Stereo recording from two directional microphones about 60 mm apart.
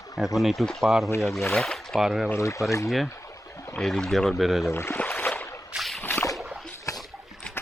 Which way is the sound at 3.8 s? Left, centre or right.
Centre.